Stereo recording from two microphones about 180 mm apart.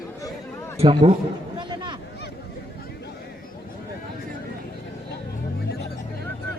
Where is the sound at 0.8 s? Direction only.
30° right (ahead or behind).